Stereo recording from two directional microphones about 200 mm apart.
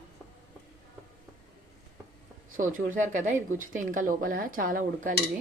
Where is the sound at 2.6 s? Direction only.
40° right (ahead or behind).